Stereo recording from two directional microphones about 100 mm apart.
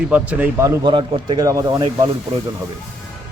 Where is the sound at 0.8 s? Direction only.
55° right (ahead or behind).